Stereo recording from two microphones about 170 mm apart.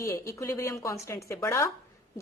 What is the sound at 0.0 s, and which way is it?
A woman's voice, 20° left (ahead or behind).